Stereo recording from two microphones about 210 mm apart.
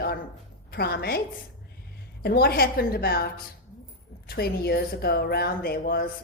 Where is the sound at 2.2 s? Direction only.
50° left (ahead or behind).